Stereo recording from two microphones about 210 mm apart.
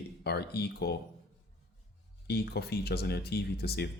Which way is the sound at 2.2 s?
50° left (ahead or behind).